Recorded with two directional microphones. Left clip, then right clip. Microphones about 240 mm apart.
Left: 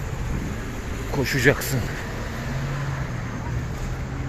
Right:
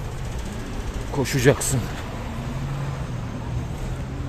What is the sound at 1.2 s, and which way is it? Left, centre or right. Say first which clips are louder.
Speech: even; centre.